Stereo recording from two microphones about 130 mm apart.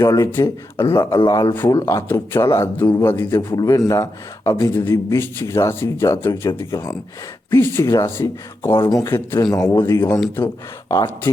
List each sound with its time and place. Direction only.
0.0 s speech: 20° left (ahead or behind)
3.5 s speech: 30° left (ahead or behind)
9.4 s speech: 30° left (ahead or behind)
9.7 s speech: 20° left (ahead or behind)